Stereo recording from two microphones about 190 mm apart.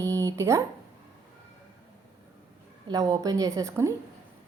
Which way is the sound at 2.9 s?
20° right (ahead or behind).